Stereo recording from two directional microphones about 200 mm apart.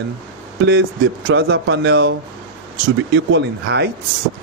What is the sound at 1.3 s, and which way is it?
Speech, 60° right (ahead or behind).